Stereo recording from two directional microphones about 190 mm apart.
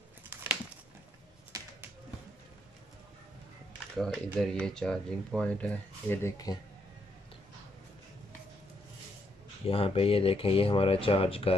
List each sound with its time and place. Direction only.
0.3 s a sound: 10° right (ahead or behind)
3.9 s speech: centre (ahead or behind); by 6.6 s 20° left (ahead or behind)
9.7 s speech: 30° left (ahead or behind)